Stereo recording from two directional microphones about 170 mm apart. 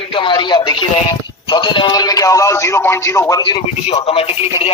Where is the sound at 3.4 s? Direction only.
30° left (ahead or behind).